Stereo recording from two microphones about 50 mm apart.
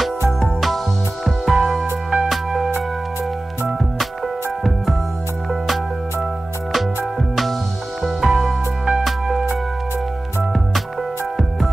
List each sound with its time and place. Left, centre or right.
0.4 s music: centre
8.0 s music: centre